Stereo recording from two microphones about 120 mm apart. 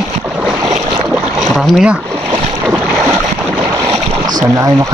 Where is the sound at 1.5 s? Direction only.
5° right (ahead or behind).